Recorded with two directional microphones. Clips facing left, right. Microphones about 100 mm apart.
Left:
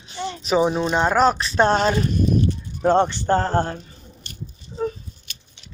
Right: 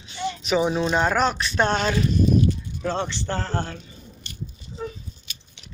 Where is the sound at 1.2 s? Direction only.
35° left (ahead or behind).